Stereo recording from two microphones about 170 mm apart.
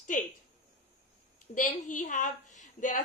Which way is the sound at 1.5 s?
50° left (ahead or behind).